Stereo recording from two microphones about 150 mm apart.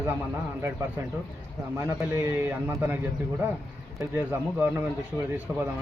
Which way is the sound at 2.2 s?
15° right (ahead or behind).